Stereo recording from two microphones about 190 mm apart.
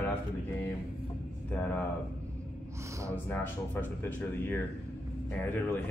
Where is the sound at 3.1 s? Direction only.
10° left (ahead or behind).